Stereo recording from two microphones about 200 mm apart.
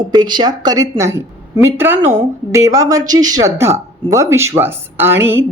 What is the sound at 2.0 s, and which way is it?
Speech, 35° right (ahead or behind).